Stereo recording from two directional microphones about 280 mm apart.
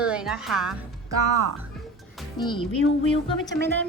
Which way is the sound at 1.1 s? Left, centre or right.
Right.